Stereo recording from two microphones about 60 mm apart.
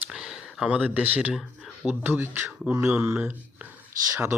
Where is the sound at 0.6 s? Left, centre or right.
Right.